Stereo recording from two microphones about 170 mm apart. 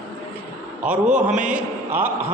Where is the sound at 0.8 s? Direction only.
5° right (ahead or behind).